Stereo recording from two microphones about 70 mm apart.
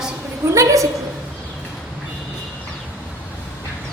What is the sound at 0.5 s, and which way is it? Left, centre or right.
Speech, right.